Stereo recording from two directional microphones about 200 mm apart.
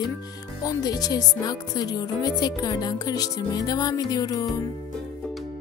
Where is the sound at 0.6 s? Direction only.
15° left (ahead or behind).